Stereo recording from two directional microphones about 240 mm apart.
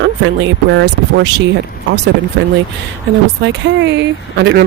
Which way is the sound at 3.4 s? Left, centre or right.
Right.